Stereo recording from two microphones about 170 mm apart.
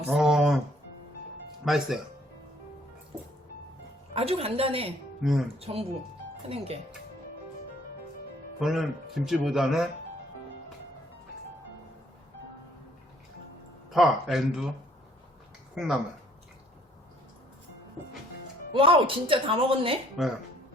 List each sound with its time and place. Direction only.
0.1 s a man's voice: centre (ahead or behind)
1.6 s a man's voice: centre (ahead or behind)
4.1 s speech: 35° right (ahead or behind)
5.2 s a man's voice: centre (ahead or behind)
5.5 s speech: 35° right (ahead or behind)
8.6 s a man's voice: centre (ahead or behind)
13.9 s a man's voice: centre (ahead or behind)
15.7 s speech: 5° right (ahead or behind)
18.7 s speech: 30° right (ahead or behind)
20.2 s a man's voice: centre (ahead or behind)